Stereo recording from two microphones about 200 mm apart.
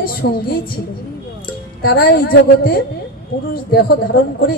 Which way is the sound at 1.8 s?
50° left (ahead or behind).